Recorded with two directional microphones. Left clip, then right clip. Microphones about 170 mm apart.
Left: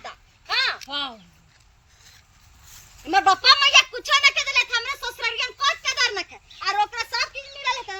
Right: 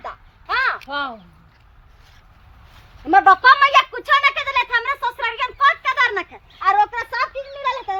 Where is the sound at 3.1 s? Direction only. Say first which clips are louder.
Right 5 dB; 20° right (ahead or behind).